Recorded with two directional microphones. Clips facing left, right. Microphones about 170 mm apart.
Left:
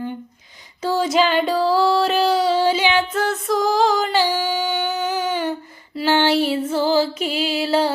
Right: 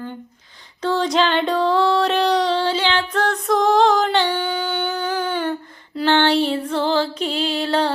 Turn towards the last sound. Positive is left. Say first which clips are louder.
# left 1 dB
turn(degrees=5)  # may be behind; listen again after turning